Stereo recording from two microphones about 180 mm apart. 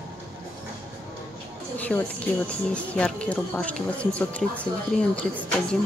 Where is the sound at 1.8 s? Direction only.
10° left (ahead or behind).